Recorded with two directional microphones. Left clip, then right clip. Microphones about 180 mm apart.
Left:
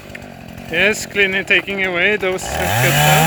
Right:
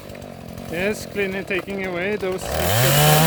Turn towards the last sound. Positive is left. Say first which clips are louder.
# left 4 dB
turn(degrees=-25)  # may be behind; listen again after turning